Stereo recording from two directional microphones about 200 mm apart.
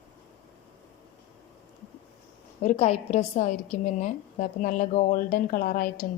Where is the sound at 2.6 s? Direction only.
30° left (ahead or behind); by 5.9 s 45° left (ahead or behind).